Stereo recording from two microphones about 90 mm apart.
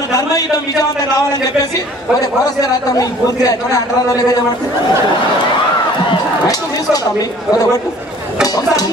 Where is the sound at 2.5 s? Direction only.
45° left (ahead or behind).